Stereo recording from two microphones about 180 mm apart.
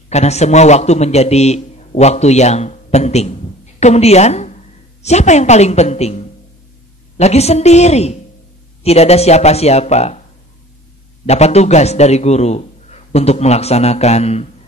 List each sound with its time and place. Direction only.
0.1 s a man's voice: 35° left (ahead or behind)
11.2 s a man's voice: 35° left (ahead or behind)